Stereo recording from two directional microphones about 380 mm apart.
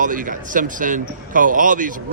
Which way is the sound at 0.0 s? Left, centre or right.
Right.